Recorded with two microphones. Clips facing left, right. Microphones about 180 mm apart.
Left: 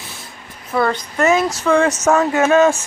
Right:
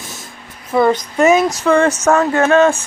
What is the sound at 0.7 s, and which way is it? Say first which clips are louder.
Child singing: right 4 dB; 20° right (ahead or behind).